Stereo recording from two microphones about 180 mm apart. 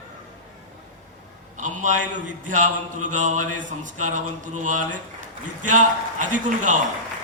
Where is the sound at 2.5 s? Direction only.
45° right (ahead or behind).